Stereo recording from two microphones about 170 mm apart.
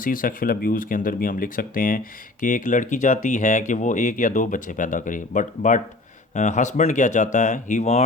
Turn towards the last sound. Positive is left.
turn(degrees=40)  # may be behind; listen again after turning